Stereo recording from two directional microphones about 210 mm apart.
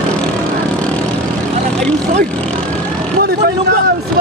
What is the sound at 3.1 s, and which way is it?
Vehicle, 50° right (ahead or behind).